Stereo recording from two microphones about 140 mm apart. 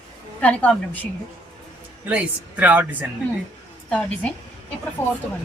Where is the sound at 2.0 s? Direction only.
10° right (ahead or behind).